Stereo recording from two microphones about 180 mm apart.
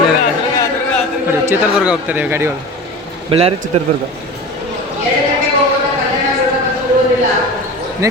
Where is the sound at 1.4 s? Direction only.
5° right (ahead or behind).